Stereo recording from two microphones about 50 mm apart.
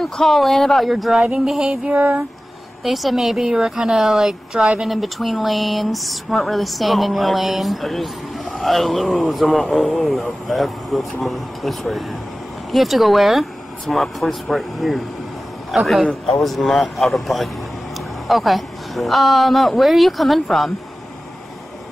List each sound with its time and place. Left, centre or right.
0.0 s speech: centre
1.4 s a woman's voice: centre
1.9 s music: right
2.8 s a woman's voice: centre